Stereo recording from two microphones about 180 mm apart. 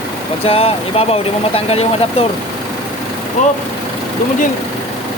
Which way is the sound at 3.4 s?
40° left (ahead or behind).